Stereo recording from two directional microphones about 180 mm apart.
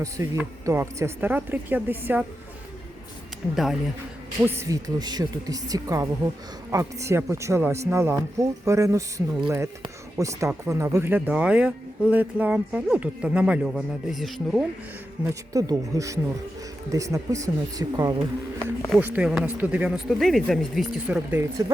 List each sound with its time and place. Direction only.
0.0 s speech: 15° right (ahead or behind)
3.5 s speech: centre (ahead or behind)
4.4 s speech: 15° right (ahead or behind)
15.2 s speech: 20° right (ahead or behind)
18.9 s speech: 10° right (ahead or behind)